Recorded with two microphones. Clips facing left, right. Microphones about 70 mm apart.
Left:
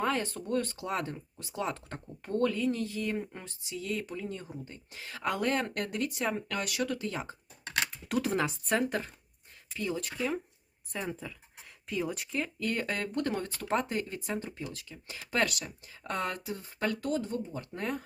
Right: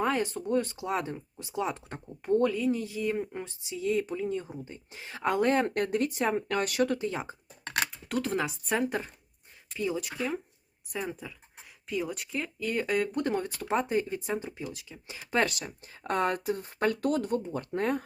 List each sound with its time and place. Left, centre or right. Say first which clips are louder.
0.0 s speech: right 3 dB; centre; by 7.0 s right
7.0 s speech: right 3 dB; right
8.0 s speech: left 2 dB; centre
8.9 s speech: right 1 dB; centre; by 18.0 s right